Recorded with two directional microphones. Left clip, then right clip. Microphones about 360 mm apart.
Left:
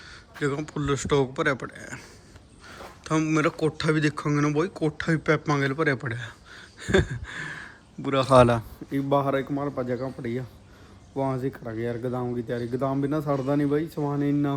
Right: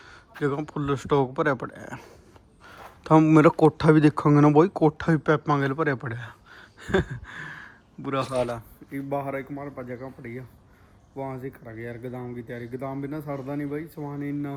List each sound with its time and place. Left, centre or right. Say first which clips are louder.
0.0 s speech: right 1 dB; centre
8.5 s a man's voice: left 7 dB; centre